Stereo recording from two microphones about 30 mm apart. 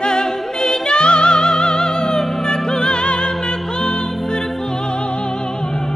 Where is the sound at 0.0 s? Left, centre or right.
Left.